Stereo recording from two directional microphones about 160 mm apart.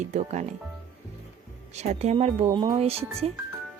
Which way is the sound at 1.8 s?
45° right (ahead or behind).